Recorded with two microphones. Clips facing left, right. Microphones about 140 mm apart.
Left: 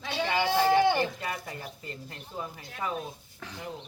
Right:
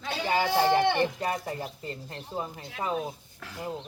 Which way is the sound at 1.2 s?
35° right (ahead or behind).